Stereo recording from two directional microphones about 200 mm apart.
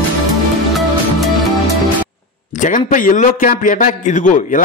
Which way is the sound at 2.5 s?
40° left (ahead or behind).